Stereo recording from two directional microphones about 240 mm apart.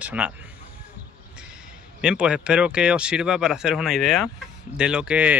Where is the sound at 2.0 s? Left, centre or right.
Centre.